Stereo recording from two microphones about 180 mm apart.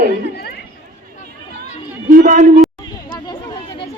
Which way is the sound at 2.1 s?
50° right (ahead or behind).